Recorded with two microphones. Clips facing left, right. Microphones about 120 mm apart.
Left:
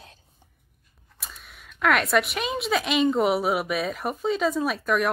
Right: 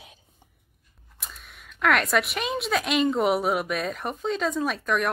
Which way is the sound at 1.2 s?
Centre (ahead or behind).